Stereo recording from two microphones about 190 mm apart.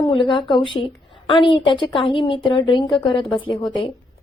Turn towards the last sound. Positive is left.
turn(degrees=25)  # may be behind; listen again after turning